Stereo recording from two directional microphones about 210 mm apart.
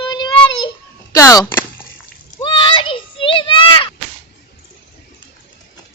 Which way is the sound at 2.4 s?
25° left (ahead or behind).